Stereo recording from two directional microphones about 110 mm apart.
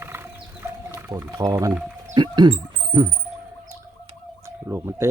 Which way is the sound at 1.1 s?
30° right (ahead or behind).